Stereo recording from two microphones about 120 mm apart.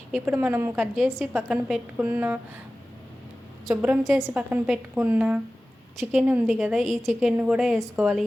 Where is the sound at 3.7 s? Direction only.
15° right (ahead or behind).